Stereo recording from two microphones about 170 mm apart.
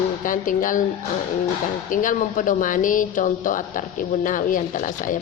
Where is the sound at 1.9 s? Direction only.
50° left (ahead or behind).